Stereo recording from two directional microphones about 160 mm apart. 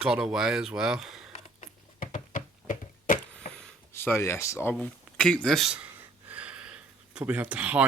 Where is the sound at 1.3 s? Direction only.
50° left (ahead or behind).